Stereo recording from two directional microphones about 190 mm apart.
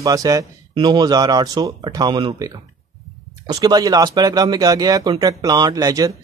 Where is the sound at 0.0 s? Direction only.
20° right (ahead or behind).